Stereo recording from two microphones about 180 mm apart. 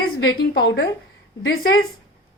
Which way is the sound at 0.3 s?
60° left (ahead or behind).